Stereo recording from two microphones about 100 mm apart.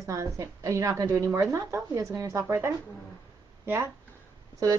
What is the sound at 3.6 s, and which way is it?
Speech, 25° right (ahead or behind).